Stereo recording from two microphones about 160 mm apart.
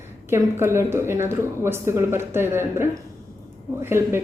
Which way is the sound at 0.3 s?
15° right (ahead or behind).